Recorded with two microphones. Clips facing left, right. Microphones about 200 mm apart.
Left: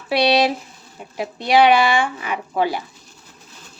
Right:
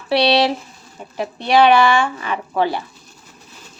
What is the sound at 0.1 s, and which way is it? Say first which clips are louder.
Speech: right 1 dB; 10° left (ahead or behind).